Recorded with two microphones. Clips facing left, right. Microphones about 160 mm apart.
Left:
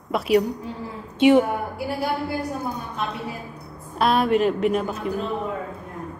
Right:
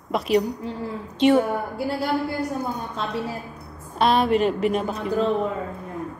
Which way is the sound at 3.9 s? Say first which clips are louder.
Even; centre (ahead or behind).